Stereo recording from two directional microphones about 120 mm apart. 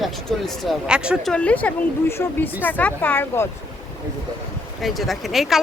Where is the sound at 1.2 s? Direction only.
10° left (ahead or behind).